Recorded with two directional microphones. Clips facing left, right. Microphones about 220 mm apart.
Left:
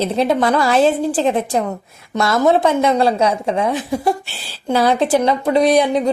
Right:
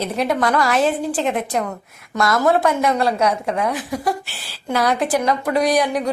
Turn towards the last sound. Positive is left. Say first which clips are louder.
# left 4 dB
turn(degrees=25)  # may be behind; listen again after turning